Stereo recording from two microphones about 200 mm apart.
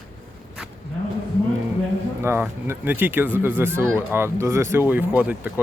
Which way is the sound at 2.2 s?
10° right (ahead or behind).